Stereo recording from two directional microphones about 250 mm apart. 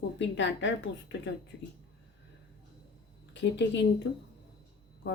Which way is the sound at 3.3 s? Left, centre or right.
Left.